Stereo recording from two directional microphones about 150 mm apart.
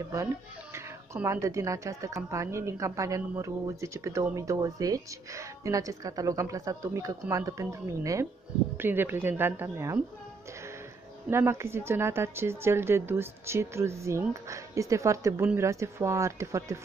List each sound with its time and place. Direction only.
0.7 s a woman's voice: 20° right (ahead or behind)
11.2 s a woman's voice: 15° right (ahead or behind)